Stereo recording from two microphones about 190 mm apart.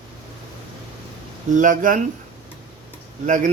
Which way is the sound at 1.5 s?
45° right (ahead or behind).